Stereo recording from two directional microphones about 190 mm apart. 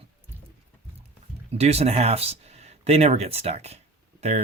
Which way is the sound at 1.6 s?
35° right (ahead or behind).